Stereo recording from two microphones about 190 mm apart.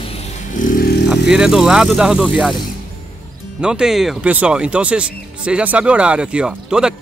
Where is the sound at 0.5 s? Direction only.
45° left (ahead or behind).